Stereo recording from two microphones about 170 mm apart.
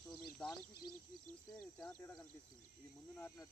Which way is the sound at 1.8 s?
10° left (ahead or behind).